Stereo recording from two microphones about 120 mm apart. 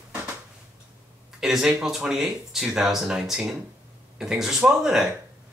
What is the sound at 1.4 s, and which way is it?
Speech, 5° right (ahead or behind).